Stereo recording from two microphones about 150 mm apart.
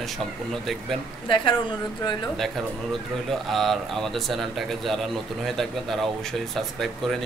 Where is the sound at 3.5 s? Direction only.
Centre (ahead or behind).